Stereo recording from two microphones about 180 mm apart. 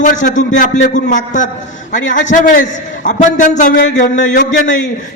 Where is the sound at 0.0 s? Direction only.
45° left (ahead or behind).